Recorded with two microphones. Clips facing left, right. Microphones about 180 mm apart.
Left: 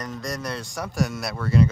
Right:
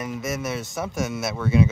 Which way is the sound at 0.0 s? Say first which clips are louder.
Right 3 dB; 5° right (ahead or behind).